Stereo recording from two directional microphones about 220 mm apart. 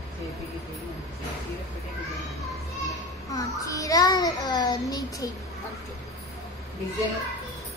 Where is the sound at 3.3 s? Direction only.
15° left (ahead or behind).